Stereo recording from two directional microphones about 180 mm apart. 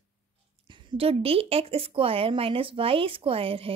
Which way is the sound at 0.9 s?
35° right (ahead or behind).